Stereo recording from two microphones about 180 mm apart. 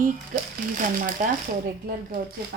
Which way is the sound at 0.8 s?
45° right (ahead or behind).